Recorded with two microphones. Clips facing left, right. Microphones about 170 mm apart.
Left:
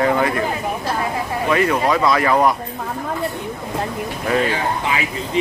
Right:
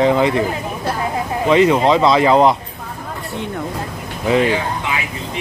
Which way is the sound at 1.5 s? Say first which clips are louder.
Right 5 dB; 20° right (ahead or behind).